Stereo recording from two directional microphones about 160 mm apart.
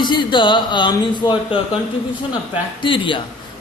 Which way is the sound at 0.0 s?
30° left (ahead or behind).